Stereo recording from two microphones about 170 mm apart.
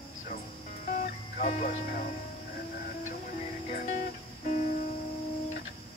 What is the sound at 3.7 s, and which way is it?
Music, 45° left (ahead or behind).